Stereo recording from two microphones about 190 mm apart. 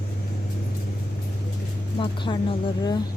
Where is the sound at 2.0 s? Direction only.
25° left (ahead or behind).